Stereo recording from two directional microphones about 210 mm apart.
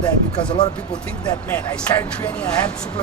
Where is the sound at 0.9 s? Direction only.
5° left (ahead or behind).